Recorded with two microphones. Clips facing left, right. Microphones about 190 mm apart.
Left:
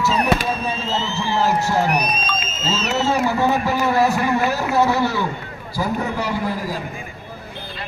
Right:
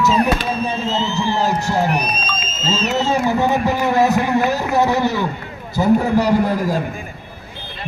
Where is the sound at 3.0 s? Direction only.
15° right (ahead or behind).